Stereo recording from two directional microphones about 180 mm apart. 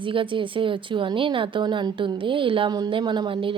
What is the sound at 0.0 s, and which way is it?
A woman's voice, 30° right (ahead or behind).